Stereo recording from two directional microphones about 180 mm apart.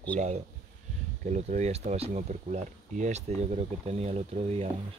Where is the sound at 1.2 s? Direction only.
40° right (ahead or behind).